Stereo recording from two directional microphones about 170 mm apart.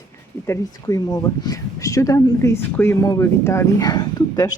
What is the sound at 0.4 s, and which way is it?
Speech, 15° left (ahead or behind).